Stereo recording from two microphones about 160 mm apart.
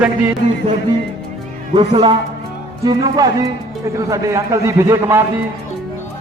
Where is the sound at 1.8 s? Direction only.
30° right (ahead or behind); by 5.3 s 15° right (ahead or behind).